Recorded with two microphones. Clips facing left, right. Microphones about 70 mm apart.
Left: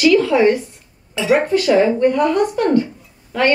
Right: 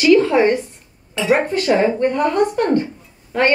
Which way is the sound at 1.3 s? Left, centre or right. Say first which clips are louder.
Left 2 dB; right.